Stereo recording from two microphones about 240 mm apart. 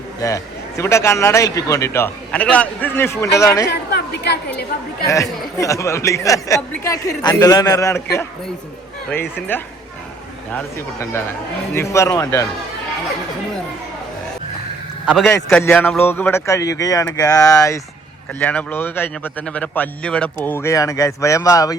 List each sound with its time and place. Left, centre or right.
0.2 s a man's voice: centre
3.7 s a woman's voice: left
5.0 s a man's voice: centre
9.0 s a man's voice: centre
15.0 s a man's voice: centre